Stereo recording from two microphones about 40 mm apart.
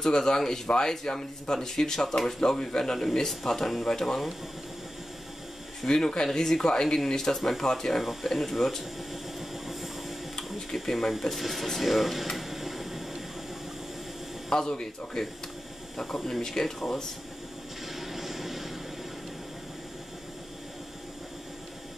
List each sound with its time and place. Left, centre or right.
0.0 s speech: centre
5.9 s speech: centre
8.0 s speech: centre
9.1 s vehicle: centre
10.3 s a sound: centre
11.1 s air conditioning: centre
14.5 s speech: centre
16.3 s speech: centre
17.8 s vehicle: centre